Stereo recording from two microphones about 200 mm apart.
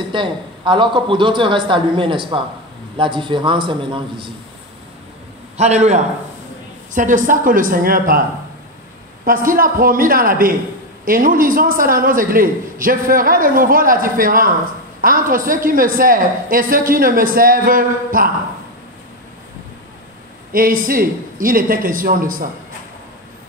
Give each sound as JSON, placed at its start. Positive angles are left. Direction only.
{"t": 0.1, "sound": "a man's voice", "side_deg": -25}
{"t": 5.6, "sound": "a man's voice", "side_deg": -35}
{"t": 20.5, "sound": "a man's voice", "side_deg": -45}